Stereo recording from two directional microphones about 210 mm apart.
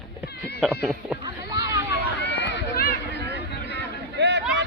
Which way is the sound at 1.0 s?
5° right (ahead or behind).